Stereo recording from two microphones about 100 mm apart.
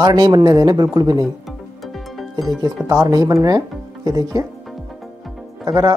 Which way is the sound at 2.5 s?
35° right (ahead or behind).